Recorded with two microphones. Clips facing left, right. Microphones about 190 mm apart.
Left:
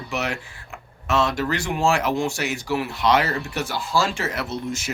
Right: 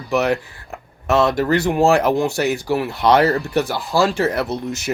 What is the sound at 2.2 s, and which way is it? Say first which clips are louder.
Speech: right 6 dB; 35° right (ahead or behind).